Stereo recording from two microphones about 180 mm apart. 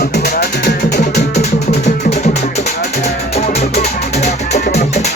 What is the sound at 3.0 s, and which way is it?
Music, 35° left (ahead or behind).